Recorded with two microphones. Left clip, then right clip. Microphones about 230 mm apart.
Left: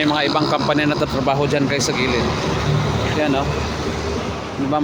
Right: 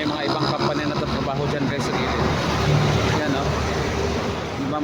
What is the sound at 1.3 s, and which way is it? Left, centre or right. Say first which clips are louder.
Speech: left 6 dB; left.